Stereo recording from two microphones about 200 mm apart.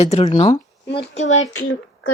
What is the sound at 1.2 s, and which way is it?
Speech, 70° left (ahead or behind).